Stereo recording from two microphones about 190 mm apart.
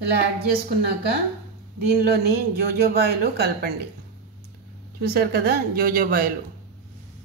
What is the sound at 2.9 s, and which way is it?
Speech, 60° right (ahead or behind).